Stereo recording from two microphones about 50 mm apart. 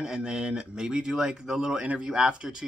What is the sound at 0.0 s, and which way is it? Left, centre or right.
Speech, centre.